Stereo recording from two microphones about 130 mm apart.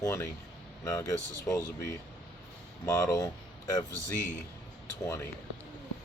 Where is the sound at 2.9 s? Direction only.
25° left (ahead or behind).